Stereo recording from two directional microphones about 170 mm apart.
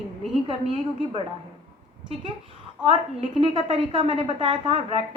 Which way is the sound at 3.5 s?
30° right (ahead or behind).